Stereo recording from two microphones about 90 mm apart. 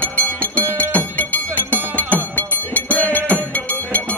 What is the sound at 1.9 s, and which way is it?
Music, 20° left (ahead or behind).